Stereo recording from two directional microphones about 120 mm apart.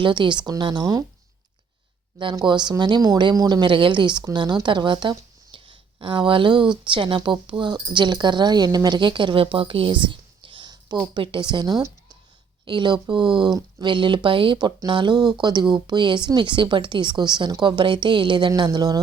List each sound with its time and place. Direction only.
0.0 s speech: 40° right (ahead or behind)
2.1 s speech: 40° right (ahead or behind)